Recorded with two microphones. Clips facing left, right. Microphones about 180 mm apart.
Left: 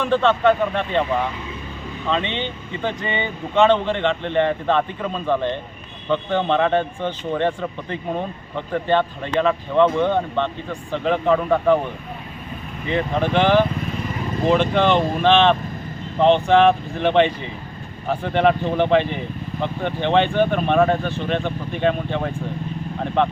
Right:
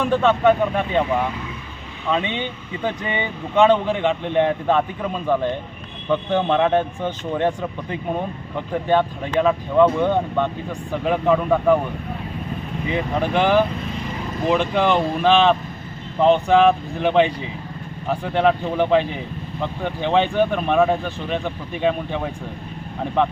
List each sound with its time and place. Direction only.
0.0 s speech: 5° right (ahead or behind)
12.9 s speech: 10° right (ahead or behind)